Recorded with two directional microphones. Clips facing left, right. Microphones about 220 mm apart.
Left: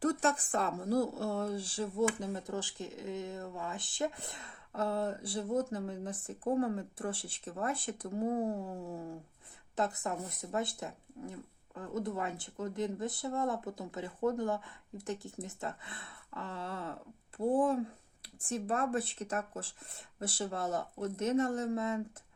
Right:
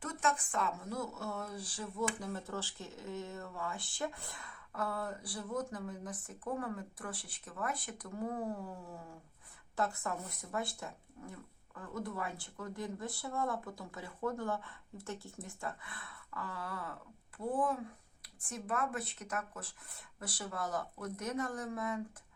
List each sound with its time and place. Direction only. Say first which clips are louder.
0.0 s speech: left 6 dB; 35° left (ahead or behind)